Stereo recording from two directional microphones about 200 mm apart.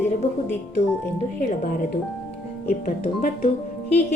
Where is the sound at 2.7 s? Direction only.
35° left (ahead or behind).